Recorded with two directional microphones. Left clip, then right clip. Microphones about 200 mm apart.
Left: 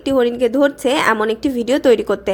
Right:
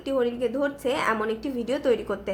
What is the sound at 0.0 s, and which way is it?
A woman's voice, 40° left (ahead or behind).